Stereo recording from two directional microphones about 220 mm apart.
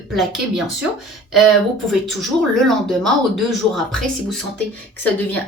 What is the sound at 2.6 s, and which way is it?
Speech, centre (ahead or behind).